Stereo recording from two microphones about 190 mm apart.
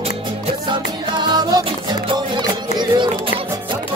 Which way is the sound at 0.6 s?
25° right (ahead or behind).